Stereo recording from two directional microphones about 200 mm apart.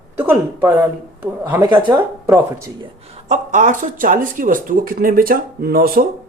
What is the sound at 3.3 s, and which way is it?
Speech, 40° right (ahead or behind).